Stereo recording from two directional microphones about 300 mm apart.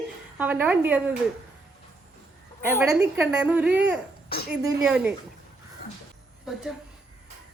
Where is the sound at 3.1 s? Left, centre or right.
Centre.